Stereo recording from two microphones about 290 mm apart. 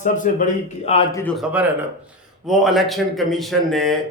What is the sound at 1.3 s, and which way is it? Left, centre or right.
Speech, centre.